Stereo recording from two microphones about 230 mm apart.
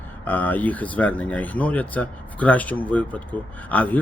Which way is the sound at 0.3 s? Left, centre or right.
Centre.